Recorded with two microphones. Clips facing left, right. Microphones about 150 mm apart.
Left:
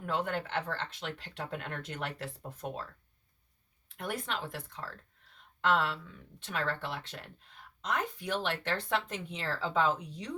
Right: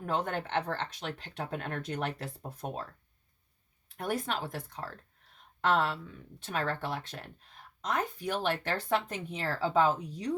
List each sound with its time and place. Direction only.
0.0 s speech: 40° right (ahead or behind)
3.9 s speech: 40° right (ahead or behind)